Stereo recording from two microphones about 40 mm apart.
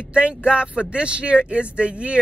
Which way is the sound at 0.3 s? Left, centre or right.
Right.